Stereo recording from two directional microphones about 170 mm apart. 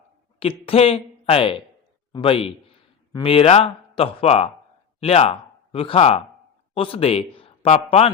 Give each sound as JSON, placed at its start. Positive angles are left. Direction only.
{"t": 0.3, "sound": "a woman's voice", "side_deg": 35}